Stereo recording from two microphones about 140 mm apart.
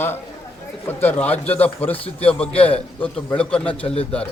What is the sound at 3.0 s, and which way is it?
Speech, 10° left (ahead or behind).